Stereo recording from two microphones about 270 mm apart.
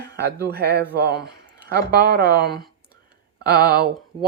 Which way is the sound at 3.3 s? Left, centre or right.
Right.